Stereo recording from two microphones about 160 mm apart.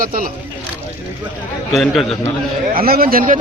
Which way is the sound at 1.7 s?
Centre (ahead or behind).